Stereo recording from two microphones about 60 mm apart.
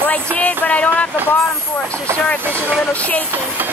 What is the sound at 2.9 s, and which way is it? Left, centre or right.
Music, left.